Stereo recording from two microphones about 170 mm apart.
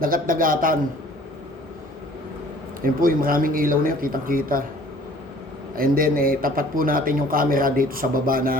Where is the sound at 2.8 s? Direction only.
55° right (ahead or behind).